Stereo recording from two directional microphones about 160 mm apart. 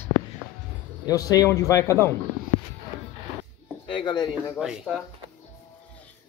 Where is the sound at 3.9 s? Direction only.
30° left (ahead or behind).